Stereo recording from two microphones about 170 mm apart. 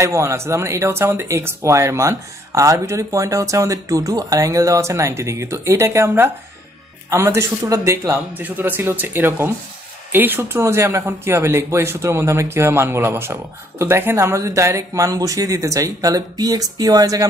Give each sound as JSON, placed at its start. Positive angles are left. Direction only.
{"t": 0.0, "sound": "a man's voice", "side_deg": -15}